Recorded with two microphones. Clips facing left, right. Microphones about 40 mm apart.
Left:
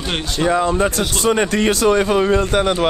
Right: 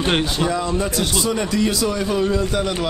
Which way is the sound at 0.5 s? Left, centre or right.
Left.